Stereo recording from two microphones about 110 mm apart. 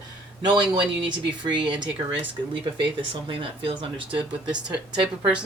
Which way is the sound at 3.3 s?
55° right (ahead or behind).